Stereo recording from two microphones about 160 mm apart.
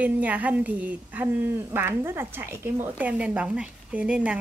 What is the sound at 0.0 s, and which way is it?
Speech, 10° right (ahead or behind).